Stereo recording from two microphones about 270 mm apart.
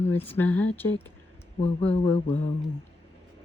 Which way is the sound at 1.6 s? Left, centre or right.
Left.